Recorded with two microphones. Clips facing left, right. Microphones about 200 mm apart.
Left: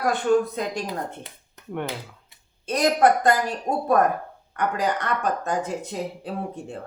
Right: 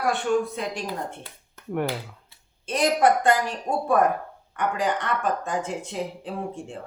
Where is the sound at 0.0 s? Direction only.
40° left (ahead or behind).